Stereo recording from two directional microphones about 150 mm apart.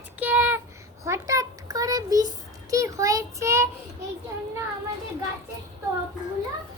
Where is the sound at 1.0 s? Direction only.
20° right (ahead or behind).